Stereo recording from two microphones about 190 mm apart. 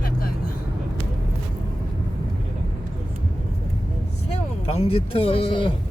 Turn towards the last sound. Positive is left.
turn(degrees=25)  # may be behind; listen again after turning